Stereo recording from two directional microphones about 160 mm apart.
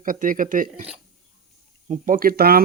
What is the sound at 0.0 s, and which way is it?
Speech, 60° right (ahead or behind).